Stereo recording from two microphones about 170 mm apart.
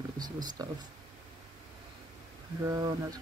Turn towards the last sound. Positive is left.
turn(degrees=-20)  # may be behind; listen again after turning